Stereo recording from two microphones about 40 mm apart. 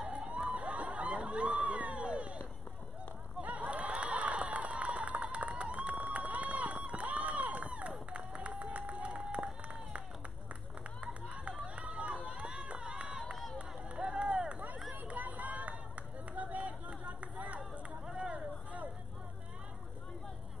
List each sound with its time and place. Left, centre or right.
0.1 s emergency vehicle: right
0.5 s a sound: right
3.4 s a sound: right
6.0 s run: right
11.2 s run: right
15.0 s run: right
18.1 s vehicle: right